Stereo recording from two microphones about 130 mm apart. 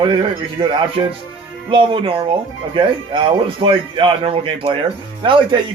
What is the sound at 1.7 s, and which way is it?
A man's voice, 40° right (ahead or behind).